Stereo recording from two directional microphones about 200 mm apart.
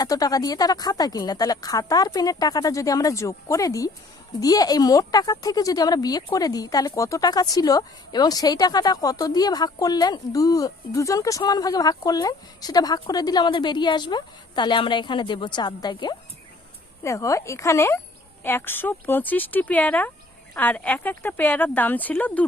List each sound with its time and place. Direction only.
0.0 s speech: 20° left (ahead or behind)